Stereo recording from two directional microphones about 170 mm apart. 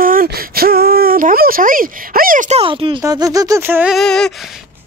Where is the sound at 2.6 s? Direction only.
30° right (ahead or behind).